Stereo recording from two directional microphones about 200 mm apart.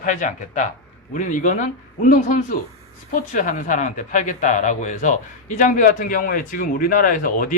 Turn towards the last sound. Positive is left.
turn(degrees=45)  # may be behind; listen again after turning